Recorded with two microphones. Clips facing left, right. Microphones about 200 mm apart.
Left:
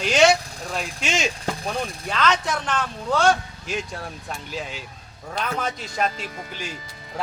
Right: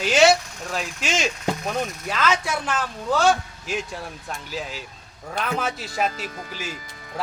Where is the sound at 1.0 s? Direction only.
Centre (ahead or behind).